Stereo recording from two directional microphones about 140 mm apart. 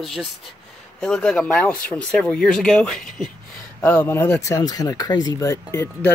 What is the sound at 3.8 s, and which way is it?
Speech, 15° left (ahead or behind).